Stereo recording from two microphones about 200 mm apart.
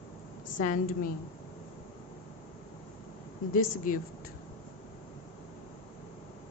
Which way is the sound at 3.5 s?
40° left (ahead or behind).